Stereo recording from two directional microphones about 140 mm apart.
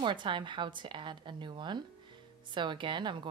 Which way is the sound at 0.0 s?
35° right (ahead or behind).